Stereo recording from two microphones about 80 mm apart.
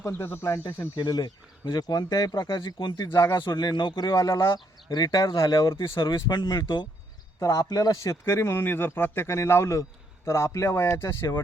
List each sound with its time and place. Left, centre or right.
0.0 s speech: left
0.9 s speech: left
4.1 s a man's voice: left
4.5 s speech: left
5.4 s speech: left
6.0 s speech: left
7.3 s a man's voice: left
8.2 s a man's voice: left